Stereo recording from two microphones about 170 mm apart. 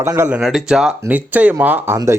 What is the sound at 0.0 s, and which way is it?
Speech, 15° right (ahead or behind).